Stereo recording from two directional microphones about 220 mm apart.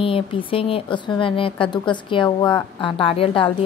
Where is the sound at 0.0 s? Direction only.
25° left (ahead or behind).